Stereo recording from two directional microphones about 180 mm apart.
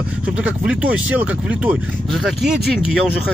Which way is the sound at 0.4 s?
5° right (ahead or behind).